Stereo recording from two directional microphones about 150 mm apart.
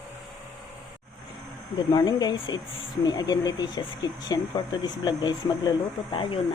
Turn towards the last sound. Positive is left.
turn(degrees=35)  # may be behind; listen again after turning